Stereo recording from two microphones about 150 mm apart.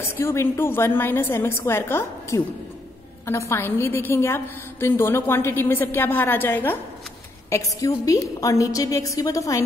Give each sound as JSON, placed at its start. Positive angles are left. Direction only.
{"t": 0.1, "sound": "a woman's voice", "side_deg": 15}